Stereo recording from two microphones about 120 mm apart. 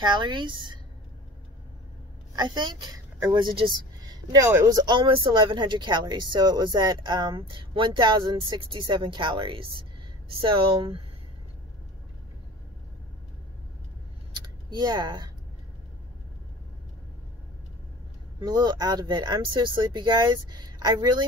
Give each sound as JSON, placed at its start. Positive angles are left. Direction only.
{"t": 0.0, "sound": "speech", "side_deg": -40}
{"t": 2.3, "sound": "a woman's voice", "side_deg": -40}
{"t": 14.4, "sound": "a sound", "side_deg": -35}
{"t": 18.4, "sound": "speech", "side_deg": -35}